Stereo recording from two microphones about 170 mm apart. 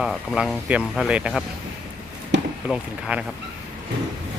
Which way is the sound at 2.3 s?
90° right.